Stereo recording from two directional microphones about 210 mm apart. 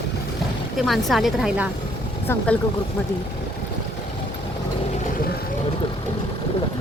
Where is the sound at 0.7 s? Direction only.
Centre (ahead or behind).